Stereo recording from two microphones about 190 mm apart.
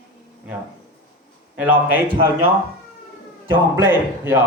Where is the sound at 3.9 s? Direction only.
10° right (ahead or behind).